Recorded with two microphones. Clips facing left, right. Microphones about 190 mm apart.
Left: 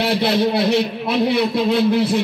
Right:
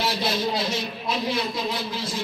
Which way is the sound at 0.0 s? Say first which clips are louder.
Left 8 dB; 65° left (ahead or behind).